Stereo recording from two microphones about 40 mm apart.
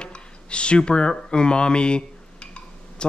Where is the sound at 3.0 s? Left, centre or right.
Left.